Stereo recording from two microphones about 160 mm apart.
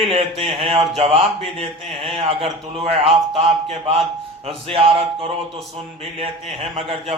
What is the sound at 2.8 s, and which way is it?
Speech, 35° right (ahead or behind).